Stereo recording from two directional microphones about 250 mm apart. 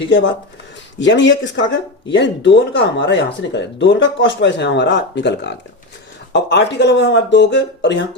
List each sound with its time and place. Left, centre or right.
0.1 s speech: left